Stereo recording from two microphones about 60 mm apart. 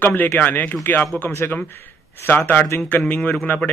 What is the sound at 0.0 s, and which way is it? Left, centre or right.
Speech, left.